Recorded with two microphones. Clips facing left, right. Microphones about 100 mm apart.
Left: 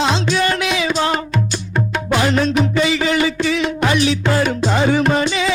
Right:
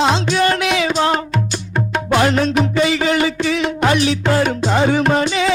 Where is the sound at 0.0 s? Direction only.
45° right (ahead or behind).